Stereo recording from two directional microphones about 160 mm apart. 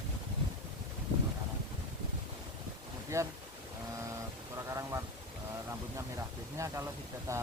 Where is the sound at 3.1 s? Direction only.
15° right (ahead or behind).